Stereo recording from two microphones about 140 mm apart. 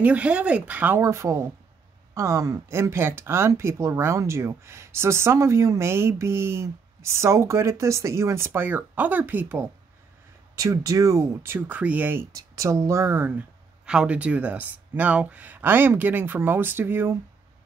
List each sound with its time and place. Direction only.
0.0 s speech: 10° right (ahead or behind)